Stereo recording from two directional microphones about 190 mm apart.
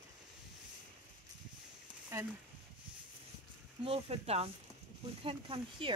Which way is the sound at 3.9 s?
30° right (ahead or behind).